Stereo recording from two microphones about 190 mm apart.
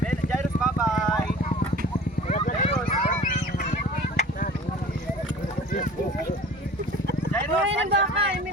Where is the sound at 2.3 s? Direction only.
40° left (ahead or behind).